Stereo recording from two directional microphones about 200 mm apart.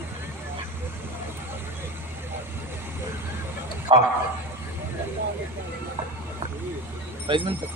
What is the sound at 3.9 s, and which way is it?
Speech, 25° right (ahead or behind).